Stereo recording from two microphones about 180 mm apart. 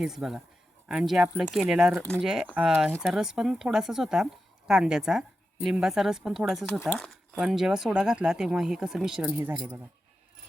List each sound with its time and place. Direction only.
0.0 s speech: centre (ahead or behind)